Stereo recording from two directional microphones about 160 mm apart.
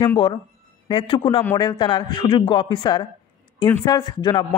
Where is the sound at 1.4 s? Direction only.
20° left (ahead or behind).